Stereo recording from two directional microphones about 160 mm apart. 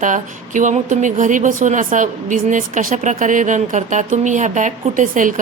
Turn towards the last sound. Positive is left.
turn(degrees=-55)  # may be behind; listen again after turning